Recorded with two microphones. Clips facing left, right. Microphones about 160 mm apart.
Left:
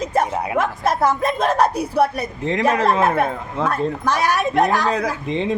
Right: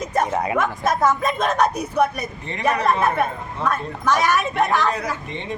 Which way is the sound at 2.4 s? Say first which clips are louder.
Left 4 dB; 90° left.